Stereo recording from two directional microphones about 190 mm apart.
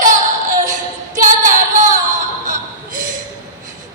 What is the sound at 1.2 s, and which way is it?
Female singing, 40° right (ahead or behind).